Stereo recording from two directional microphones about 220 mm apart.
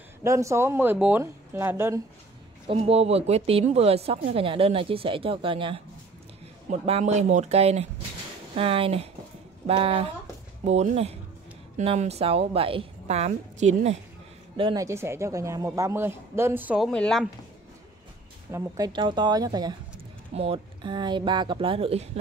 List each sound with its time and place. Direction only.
0.2 s speech: 15° right (ahead or behind)
2.6 s speech: 25° right (ahead or behind)
14.6 s speech: 15° right (ahead or behind); by 17.3 s 5° left (ahead or behind)
18.5 s speech: 20° right (ahead or behind)